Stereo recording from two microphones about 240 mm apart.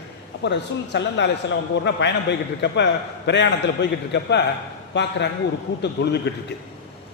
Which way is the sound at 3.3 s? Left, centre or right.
Left.